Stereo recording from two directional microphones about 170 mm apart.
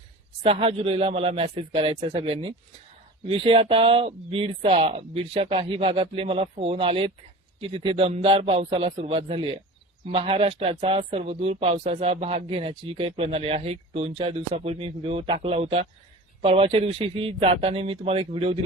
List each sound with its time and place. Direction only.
0.4 s speech: 35° right (ahead or behind)